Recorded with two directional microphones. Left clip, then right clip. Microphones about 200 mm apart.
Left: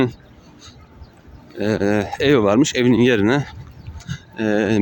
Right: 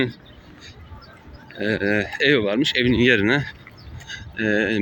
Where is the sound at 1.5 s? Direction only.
25° left (ahead or behind).